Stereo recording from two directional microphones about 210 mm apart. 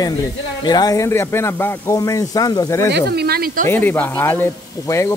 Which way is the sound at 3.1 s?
45° right (ahead or behind).